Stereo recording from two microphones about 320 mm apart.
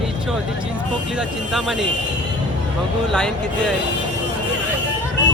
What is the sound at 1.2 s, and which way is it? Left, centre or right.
Speech, centre.